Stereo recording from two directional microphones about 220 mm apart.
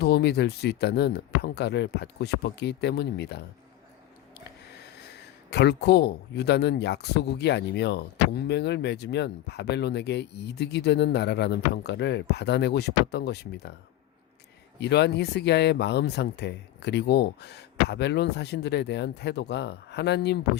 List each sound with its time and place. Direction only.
0.0 s speech: 50° left (ahead or behind)
5.5 s speech: 50° left (ahead or behind)
14.8 s speech: 50° left (ahead or behind)